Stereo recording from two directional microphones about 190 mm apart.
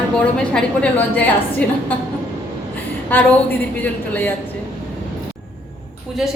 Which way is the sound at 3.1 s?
10° left (ahead or behind).